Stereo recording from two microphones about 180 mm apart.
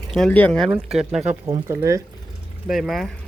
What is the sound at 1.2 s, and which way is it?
Speech, 35° right (ahead or behind).